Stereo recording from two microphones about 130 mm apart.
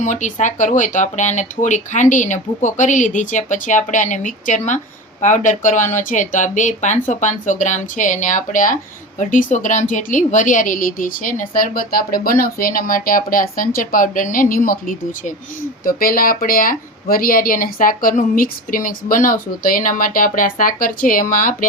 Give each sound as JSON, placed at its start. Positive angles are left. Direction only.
{"t": 0.0, "sound": "speech", "side_deg": 70}